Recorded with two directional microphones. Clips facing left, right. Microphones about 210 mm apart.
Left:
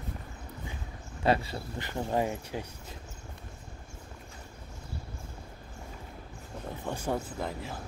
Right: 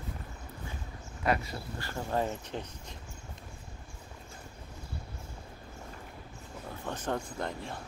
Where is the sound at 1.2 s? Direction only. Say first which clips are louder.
Left 3 dB; 30° left (ahead or behind); by 2.6 s 15° left (ahead or behind).